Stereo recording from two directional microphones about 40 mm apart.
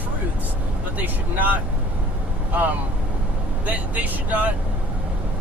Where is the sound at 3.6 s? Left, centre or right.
Right.